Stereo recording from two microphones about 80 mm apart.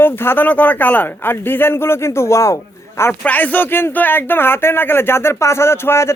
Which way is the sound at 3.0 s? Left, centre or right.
Left.